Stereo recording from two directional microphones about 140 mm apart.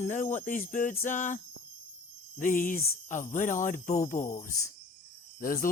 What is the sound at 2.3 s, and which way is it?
Speech, 75° left (ahead or behind).